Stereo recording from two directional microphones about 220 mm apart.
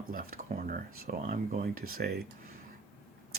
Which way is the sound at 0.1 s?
40° right (ahead or behind).